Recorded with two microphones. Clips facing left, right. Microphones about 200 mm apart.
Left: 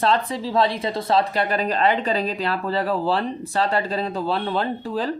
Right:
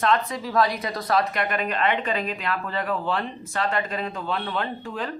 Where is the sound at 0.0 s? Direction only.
30° left (ahead or behind).